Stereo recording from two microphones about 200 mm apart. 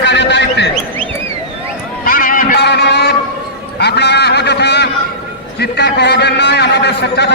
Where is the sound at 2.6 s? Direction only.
55° left (ahead or behind).